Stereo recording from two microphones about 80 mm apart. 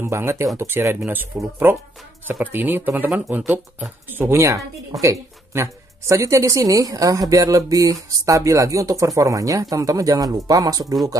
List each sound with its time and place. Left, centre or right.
0.0 s speech: right